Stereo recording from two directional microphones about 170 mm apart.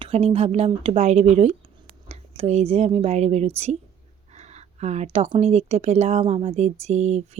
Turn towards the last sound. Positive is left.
turn(degrees=-40)  # may be behind; listen again after turning